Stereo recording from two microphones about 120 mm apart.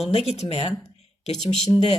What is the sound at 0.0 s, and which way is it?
Speech, 60° left (ahead or behind).